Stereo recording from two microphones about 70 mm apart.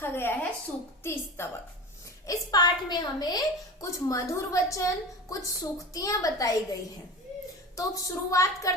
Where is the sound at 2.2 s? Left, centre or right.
Left.